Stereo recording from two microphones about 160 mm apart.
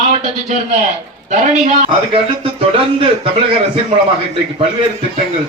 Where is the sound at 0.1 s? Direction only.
45° right (ahead or behind).